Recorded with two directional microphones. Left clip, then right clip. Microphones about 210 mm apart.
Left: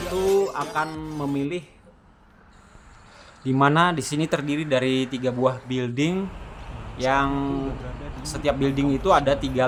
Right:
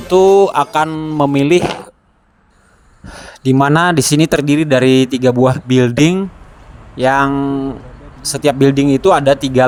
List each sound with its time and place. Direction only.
0.2 s music: 45° right (ahead or behind)
0.9 s speech: 35° right (ahead or behind)
1.2 s music: 50° right (ahead or behind)
3.1 s speech: 45° right (ahead or behind)
7.3 s speech: 30° right (ahead or behind)
8.2 s speech: 40° right (ahead or behind)